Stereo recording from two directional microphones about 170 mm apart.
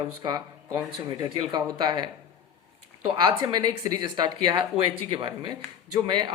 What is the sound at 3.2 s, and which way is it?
Speech, 25° right (ahead or behind).